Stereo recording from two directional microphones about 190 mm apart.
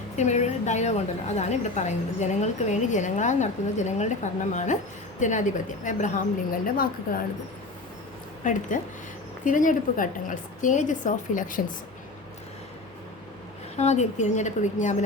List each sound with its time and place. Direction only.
0.2 s a woman's voice: 40° left (ahead or behind)
8.4 s a woman's voice: 40° left (ahead or behind)
13.7 s a woman's voice: 35° left (ahead or behind)